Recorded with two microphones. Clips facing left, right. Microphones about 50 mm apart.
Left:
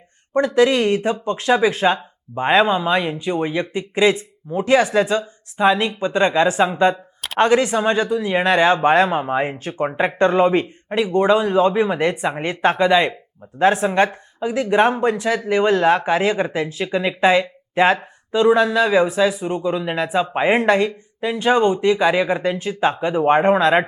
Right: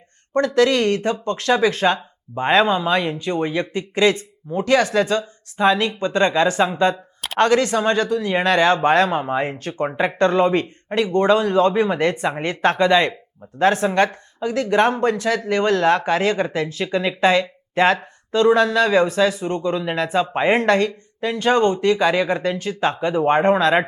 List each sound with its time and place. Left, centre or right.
0.3 s speech: centre